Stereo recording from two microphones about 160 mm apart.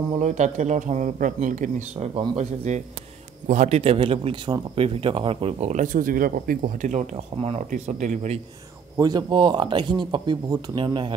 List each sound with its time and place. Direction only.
0.2 s speech: 50° right (ahead or behind)
8.9 s speech: 25° right (ahead or behind)